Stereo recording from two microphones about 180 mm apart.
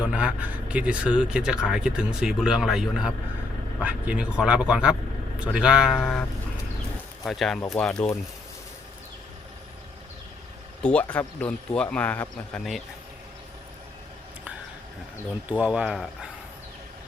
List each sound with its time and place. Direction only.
0.0 s speech: 5° right (ahead or behind)
7.3 s speech: centre (ahead or behind)
10.8 s a man's voice: 5° left (ahead or behind)
15.4 s speech: 10° right (ahead or behind)